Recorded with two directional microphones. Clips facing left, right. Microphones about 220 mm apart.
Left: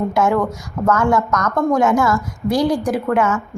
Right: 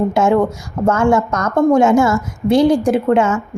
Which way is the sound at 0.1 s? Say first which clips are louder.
Right 3 dB; 25° right (ahead or behind).